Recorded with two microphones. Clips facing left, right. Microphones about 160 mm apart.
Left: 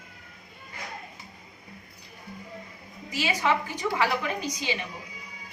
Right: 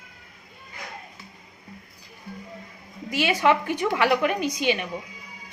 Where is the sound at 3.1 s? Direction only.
60° right (ahead or behind).